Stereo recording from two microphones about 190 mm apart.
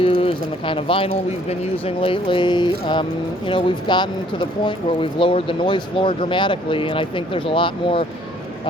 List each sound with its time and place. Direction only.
0.0 s speech: 30° left (ahead or behind)